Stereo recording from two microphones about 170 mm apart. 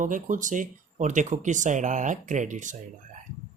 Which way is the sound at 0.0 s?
50° right (ahead or behind).